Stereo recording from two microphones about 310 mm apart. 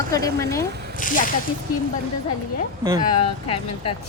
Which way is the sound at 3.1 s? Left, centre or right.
Centre.